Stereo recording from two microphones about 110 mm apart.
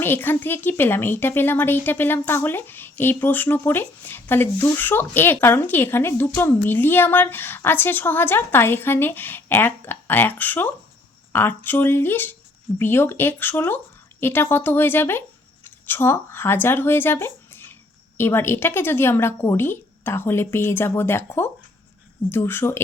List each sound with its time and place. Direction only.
0.0 s speech: 20° left (ahead or behind)